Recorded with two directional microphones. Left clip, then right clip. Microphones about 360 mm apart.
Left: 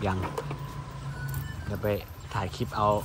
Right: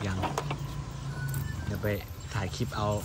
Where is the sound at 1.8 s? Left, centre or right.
Centre.